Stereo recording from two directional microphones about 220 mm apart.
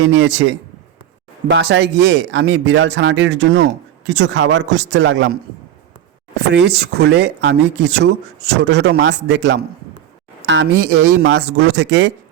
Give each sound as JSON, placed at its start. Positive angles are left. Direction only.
{"t": 0.0, "sound": "speech", "side_deg": -60}